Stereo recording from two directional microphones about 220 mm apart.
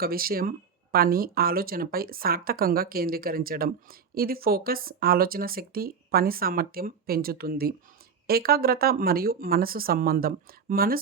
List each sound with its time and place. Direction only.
0.0 s speech: 40° right (ahead or behind)